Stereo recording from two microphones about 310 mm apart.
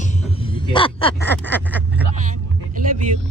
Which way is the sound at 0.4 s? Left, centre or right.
Centre.